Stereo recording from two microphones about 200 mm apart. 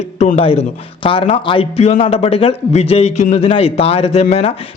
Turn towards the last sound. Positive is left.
turn(degrees=30)  # may be behind; listen again after turning